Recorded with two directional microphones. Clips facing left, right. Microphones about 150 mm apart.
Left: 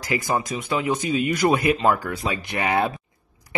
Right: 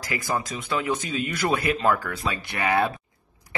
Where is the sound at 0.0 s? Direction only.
20° left (ahead or behind).